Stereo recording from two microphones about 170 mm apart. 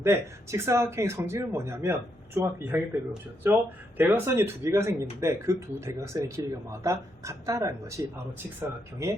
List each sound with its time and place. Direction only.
0.0 s speech: 15° right (ahead or behind)